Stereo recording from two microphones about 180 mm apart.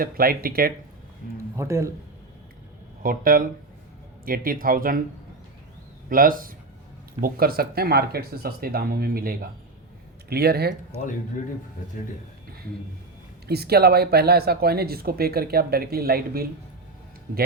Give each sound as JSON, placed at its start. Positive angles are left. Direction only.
{"t": 0.0, "sound": "speech", "side_deg": -55}
{"t": 1.2, "sound": "speech", "side_deg": 50}
{"t": 1.5, "sound": "speech", "side_deg": -15}
{"t": 3.0, "sound": "speech", "side_deg": -50}
{"t": 6.1, "sound": "speech", "side_deg": -50}
{"t": 13.5, "sound": "speech", "side_deg": -60}